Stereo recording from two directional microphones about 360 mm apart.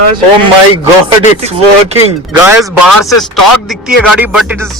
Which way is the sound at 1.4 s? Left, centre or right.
Centre.